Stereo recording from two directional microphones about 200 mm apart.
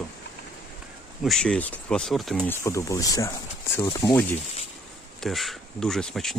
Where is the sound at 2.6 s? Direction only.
15° left (ahead or behind).